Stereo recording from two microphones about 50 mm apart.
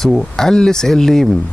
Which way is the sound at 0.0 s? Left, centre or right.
Centre.